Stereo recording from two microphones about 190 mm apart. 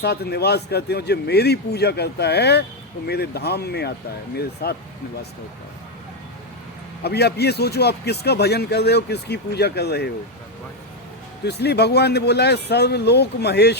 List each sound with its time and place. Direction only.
0.0 s speech: 60° left (ahead or behind)
7.0 s speech: 60° left (ahead or behind)
11.4 s speech: 60° left (ahead or behind)